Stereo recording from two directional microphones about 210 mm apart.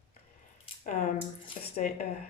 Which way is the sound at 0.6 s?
35° left (ahead or behind).